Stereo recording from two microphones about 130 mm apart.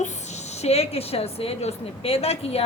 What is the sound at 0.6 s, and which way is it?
A woman's voice, 50° left (ahead or behind).